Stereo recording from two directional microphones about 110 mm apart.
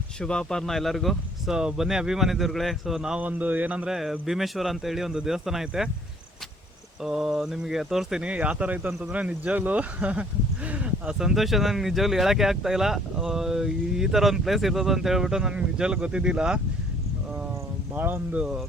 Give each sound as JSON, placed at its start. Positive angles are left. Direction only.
{"t": 0.2, "sound": "speech", "side_deg": 5}
{"t": 7.0, "sound": "speech", "side_deg": -5}
{"t": 8.9, "sound": "speech", "side_deg": -5}
{"t": 17.9, "sound": "speech", "side_deg": -15}